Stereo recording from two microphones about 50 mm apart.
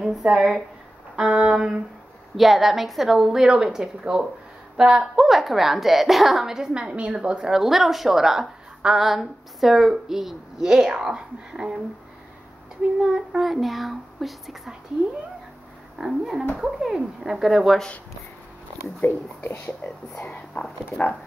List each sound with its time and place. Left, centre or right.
0.0 s speech: centre
1.3 s a sound: right
2.3 s a woman's voice: centre
13.0 s a woman's voice: centre
13.5 s speech: centre
16.0 s a woman's voice: centre
18.9 s speech: left